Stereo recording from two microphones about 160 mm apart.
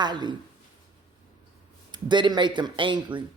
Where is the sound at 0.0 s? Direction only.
25° right (ahead or behind).